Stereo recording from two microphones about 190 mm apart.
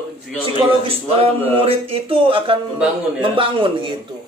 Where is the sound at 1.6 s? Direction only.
30° right (ahead or behind).